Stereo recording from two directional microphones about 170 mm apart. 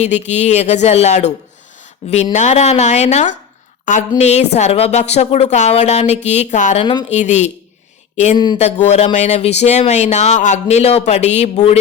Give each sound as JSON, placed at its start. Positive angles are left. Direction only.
{"t": 0.3, "sound": "speech", "side_deg": 40}
{"t": 2.3, "sound": "a woman's voice", "side_deg": 45}